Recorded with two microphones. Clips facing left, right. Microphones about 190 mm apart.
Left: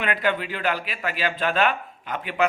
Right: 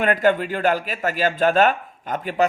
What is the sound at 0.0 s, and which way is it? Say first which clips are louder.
A man's voice: right 6 dB; 45° right (ahead or behind).